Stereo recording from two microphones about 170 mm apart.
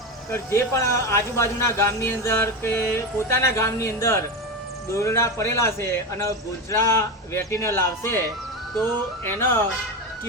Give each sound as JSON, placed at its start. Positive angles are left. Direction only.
{"t": 0.3, "sound": "a man's voice", "side_deg": 15}
{"t": 9.2, "sound": "a man's voice", "side_deg": 15}